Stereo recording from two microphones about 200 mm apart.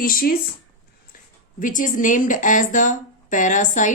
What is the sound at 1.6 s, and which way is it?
Speech, 40° left (ahead or behind).